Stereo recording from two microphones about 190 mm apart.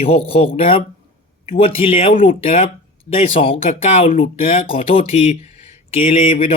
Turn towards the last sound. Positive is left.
turn(degrees=30)  # may be behind; listen again after turning